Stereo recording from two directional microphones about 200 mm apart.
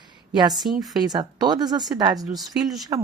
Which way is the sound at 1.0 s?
20° right (ahead or behind).